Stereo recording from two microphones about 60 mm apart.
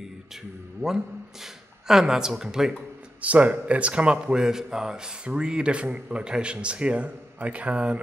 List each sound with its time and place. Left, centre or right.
1.4 s speech: centre
3.2 s speech: right